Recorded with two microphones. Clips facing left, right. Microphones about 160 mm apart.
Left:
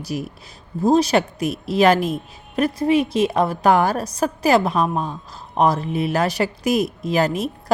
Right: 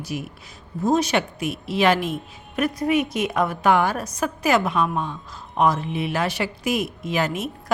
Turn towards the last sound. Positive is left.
turn(degrees=35)  # may be behind; listen again after turning